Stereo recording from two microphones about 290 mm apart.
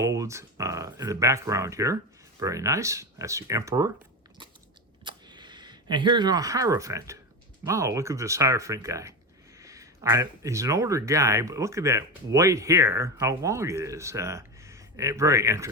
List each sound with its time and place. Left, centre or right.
0.0 s speech: centre
5.0 s speech: centre